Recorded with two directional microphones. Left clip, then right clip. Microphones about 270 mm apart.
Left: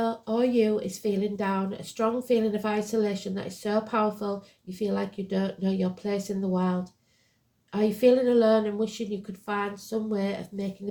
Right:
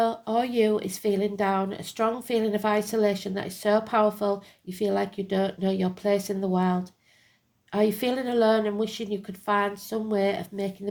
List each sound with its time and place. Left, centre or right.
0.0 s speech: right